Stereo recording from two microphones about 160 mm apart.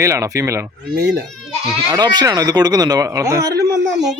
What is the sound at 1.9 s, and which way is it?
A man's voice, 25° right (ahead or behind).